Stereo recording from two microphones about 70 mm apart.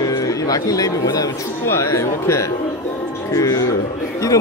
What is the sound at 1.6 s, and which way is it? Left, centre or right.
Speech, left.